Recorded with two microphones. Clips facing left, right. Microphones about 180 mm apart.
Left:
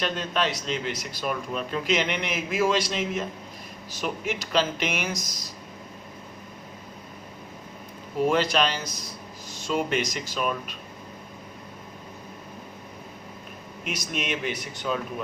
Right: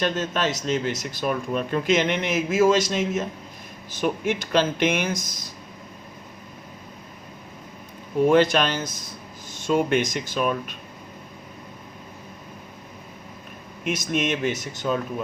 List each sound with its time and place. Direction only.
0.0 s speech: 45° right (ahead or behind)
8.3 s speech: 50° right (ahead or behind)
13.9 s speech: 50° right (ahead or behind)